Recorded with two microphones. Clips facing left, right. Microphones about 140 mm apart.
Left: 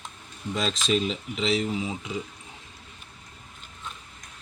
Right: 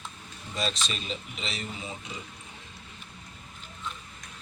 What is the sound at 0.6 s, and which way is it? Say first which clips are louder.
Speech: left 7 dB; 90° left.